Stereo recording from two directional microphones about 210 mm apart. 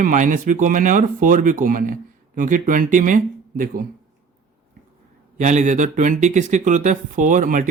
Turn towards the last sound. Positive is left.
turn(degrees=-40)  # may be behind; listen again after turning